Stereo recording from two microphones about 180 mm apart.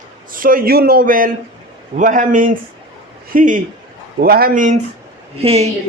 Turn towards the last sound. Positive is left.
turn(degrees=-35)  # may be behind; listen again after turning